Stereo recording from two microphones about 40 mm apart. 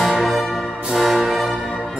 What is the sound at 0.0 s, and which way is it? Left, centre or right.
Music, centre.